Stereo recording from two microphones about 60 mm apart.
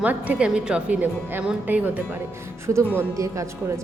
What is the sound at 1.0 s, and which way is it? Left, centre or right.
A woman's voice, right.